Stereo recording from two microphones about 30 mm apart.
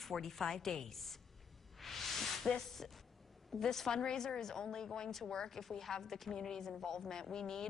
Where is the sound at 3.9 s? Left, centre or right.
Left.